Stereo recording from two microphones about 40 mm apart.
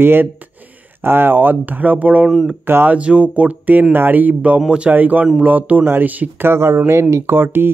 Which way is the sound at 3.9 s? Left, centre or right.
Right.